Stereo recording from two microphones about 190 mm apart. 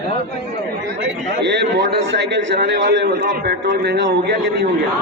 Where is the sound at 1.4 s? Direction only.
65° right (ahead or behind).